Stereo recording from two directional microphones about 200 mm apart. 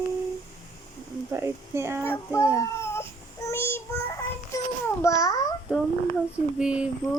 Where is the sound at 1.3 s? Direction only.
15° right (ahead or behind).